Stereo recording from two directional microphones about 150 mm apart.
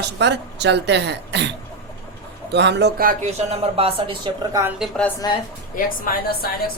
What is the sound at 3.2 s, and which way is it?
Speech, 45° right (ahead or behind).